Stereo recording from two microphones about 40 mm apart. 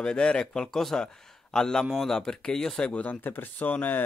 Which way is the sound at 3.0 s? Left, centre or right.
Left.